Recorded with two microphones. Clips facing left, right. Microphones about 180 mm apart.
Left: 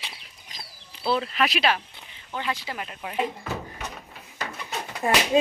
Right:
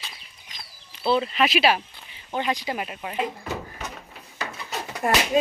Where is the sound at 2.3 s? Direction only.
15° right (ahead or behind).